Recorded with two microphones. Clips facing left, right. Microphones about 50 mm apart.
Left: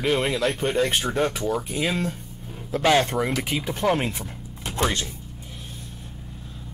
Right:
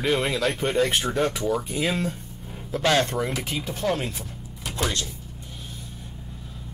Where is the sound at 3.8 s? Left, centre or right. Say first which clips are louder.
Left 3 dB; left.